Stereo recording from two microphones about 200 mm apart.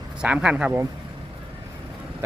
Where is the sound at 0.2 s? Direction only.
5° right (ahead or behind).